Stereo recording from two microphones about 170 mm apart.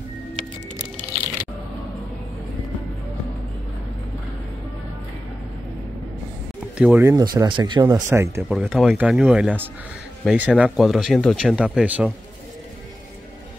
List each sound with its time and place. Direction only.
6.8 s speech: 10° right (ahead or behind); by 7.8 s 25° right (ahead or behind)
7.8 s speech: 15° right (ahead or behind)
8.5 s speech: centre (ahead or behind)